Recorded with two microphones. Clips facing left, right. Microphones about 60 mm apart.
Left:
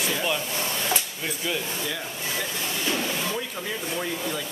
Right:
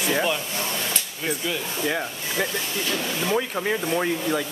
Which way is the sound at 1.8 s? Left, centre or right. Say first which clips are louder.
Right 5 dB; right.